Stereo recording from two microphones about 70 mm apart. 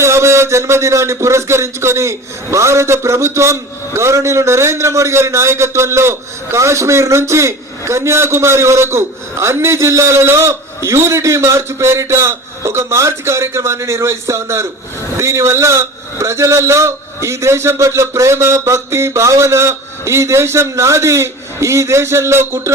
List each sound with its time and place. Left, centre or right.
0.0 s a man's voice: right